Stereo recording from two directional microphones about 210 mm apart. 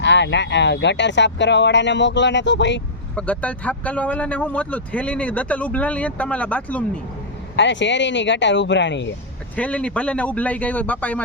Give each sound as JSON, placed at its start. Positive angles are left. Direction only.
{"t": 0.0, "sound": "speech", "side_deg": 60}
{"t": 3.2, "sound": "speech", "side_deg": 5}
{"t": 7.5, "sound": "speech", "side_deg": 60}
{"t": 9.6, "sound": "speech", "side_deg": 5}